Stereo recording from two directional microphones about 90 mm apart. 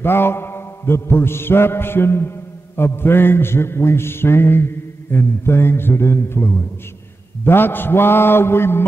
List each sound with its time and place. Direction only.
0.0 s mantra: 25° left (ahead or behind)